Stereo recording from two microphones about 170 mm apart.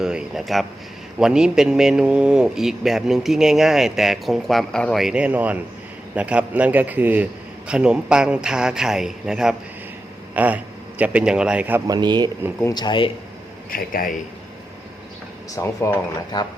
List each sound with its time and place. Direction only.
0.0 s a sound: 5° right (ahead or behind)
1.2 s a man's voice: 5° right (ahead or behind)
11.9 s speech: 25° right (ahead or behind)
12.7 s speech: 25° left (ahead or behind)
13.7 s a man's voice: 55° left (ahead or behind)
15.5 s speech: 15° left (ahead or behind)